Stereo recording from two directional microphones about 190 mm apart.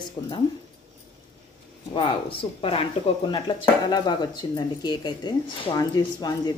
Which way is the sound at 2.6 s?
30° left (ahead or behind).